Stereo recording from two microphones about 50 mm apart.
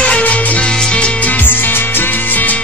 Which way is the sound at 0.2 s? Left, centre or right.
Left.